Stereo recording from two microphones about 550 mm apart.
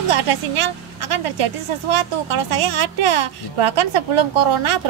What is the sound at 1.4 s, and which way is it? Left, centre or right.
Speech, right.